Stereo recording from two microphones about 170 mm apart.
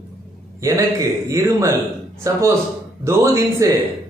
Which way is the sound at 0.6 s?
20° right (ahead or behind).